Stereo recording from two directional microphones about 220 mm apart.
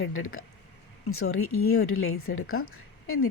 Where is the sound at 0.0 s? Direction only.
65° left (ahead or behind).